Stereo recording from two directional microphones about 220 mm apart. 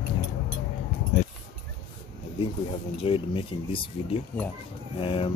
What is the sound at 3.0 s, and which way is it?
Speech, 25° left (ahead or behind).